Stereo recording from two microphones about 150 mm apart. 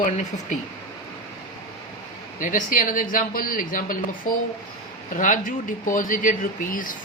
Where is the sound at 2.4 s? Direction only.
60° left (ahead or behind).